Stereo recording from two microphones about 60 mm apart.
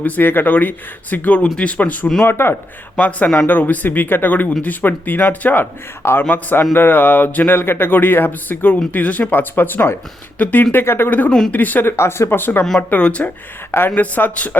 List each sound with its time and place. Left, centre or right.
0.0 s speech: left
2.2 s speech: left
3.0 s speech: left
6.0 s speech: left
11.3 s speech: centre
11.5 s speech: left
11.9 s speech: left
12.9 s speech: left
13.7 s speech: left